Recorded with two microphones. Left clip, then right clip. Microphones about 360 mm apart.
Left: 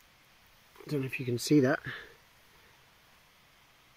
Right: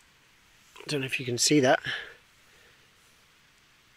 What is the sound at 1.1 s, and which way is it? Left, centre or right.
Speech, right.